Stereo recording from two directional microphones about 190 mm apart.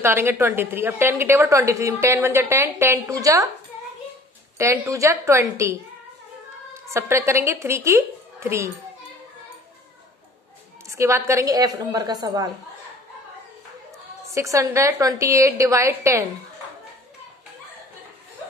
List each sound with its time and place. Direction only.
0.0 s a woman's voice: 10° right (ahead or behind)
4.6 s a woman's voice: 15° right (ahead or behind)
10.9 s a woman's voice: 15° right (ahead or behind)
14.2 s a woman's voice: 15° right (ahead or behind)